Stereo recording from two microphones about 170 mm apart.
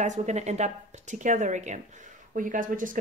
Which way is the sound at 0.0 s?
45° right (ahead or behind).